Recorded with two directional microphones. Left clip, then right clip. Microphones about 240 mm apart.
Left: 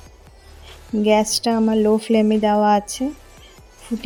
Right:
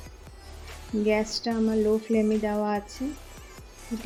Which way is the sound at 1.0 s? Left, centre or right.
Left.